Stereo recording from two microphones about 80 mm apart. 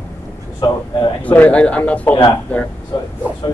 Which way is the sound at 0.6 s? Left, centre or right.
Left.